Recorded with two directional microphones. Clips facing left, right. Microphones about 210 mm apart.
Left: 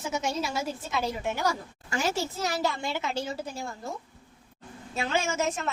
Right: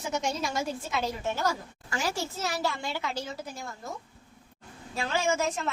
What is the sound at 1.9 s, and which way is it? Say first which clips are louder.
A woman's voice: left 3 dB; 25° left (ahead or behind).